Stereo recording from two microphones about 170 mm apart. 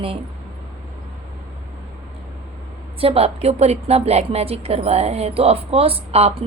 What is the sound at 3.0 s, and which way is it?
A woman's voice, 35° right (ahead or behind).